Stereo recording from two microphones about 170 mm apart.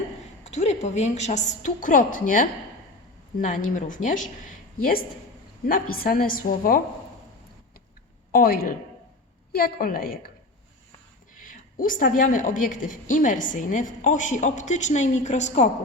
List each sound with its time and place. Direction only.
0.4 s a woman's voice: 40° left (ahead or behind)
8.3 s a woman's voice: 60° left (ahead or behind)
11.3 s a woman's voice: 50° left (ahead or behind)